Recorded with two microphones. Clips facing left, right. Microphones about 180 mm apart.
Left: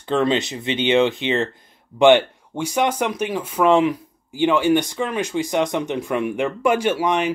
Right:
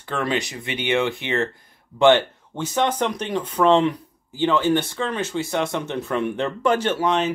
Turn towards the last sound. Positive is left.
turn(degrees=15)  # may be behind; listen again after turning